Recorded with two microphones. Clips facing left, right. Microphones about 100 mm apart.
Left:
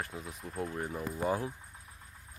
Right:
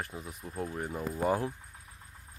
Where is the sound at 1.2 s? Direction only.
35° right (ahead or behind).